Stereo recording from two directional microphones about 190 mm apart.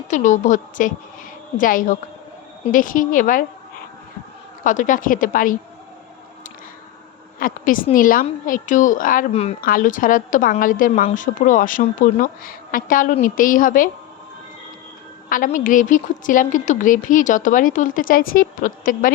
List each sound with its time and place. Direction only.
0.1 s a woman's voice: 40° left (ahead or behind)
4.6 s a woman's voice: 40° left (ahead or behind)
7.3 s a woman's voice: 45° left (ahead or behind)
9.3 s a woman's voice: 35° left (ahead or behind)
9.6 s a woman's voice: 45° left (ahead or behind)
15.3 s a woman's voice: 45° left (ahead or behind)